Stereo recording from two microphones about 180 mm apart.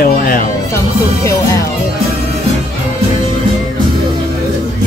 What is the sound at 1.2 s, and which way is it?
Music, 15° left (ahead or behind).